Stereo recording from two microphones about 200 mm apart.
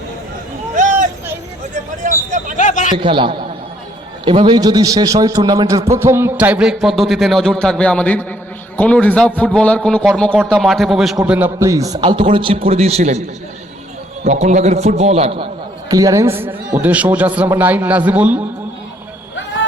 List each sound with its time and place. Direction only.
0.8 s a sound: 40° right (ahead or behind)
2.0 s vehicle: 40° right (ahead or behind)
2.6 s a sound: 40° left (ahead or behind)
3.0 s a man's voice: 25° right (ahead or behind)
14.3 s a man's voice: 35° right (ahead or behind)
15.9 s a man's voice: 15° right (ahead or behind)